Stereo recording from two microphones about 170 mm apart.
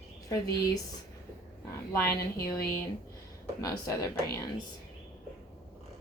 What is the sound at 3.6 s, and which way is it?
Speech, 20° left (ahead or behind).